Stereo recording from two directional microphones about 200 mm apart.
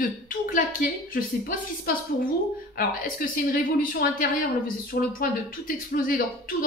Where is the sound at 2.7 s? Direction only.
45° left (ahead or behind).